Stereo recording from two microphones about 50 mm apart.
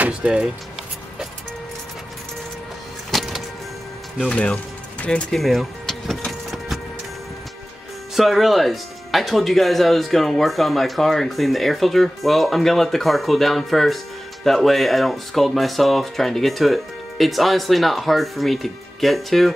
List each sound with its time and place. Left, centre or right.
0.0 s speech: centre
3.1 s music: centre
5.0 s speech: left
5.3 s speech: centre
8.2 s speech: centre